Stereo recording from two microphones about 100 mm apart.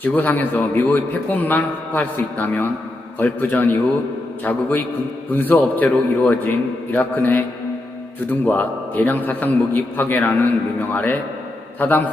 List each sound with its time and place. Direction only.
0.0 s a man's voice: 15° left (ahead or behind)
5.3 s a man's voice: 20° left (ahead or behind)